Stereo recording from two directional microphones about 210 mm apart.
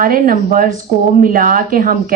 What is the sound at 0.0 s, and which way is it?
A woman's voice, 40° right (ahead or behind).